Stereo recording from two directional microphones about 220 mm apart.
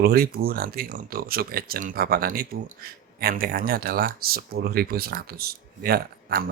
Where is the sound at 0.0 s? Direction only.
45° right (ahead or behind).